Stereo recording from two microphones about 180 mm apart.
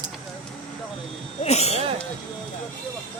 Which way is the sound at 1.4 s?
35° left (ahead or behind).